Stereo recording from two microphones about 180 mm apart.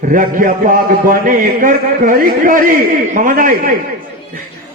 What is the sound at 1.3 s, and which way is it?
A man's voice, 50° right (ahead or behind).